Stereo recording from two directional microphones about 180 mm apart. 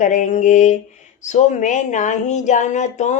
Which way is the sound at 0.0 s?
45° left (ahead or behind).